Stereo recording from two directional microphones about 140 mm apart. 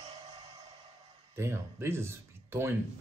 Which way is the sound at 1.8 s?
20° right (ahead or behind).